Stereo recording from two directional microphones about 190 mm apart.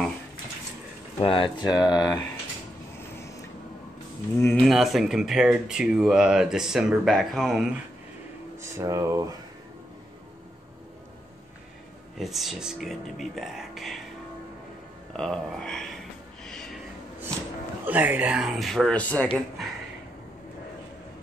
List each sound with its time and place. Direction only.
1.2 s speech: 25° left (ahead or behind)
4.4 s speech: 5° left (ahead or behind)
8.5 s speech: 15° right (ahead or behind)
12.2 s speech: centre (ahead or behind)
15.1 s speech: 5° left (ahead or behind)
16.4 s a sound: 5° left (ahead or behind)
17.8 s speech: 10° right (ahead or behind); by 19.2 s 5° left (ahead or behind)